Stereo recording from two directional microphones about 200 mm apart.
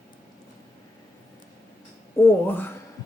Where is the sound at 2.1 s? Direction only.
10° left (ahead or behind).